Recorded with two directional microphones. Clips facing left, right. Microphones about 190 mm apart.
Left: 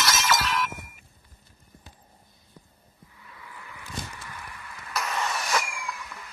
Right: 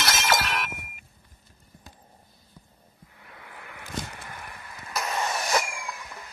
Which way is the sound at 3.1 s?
65° right (ahead or behind).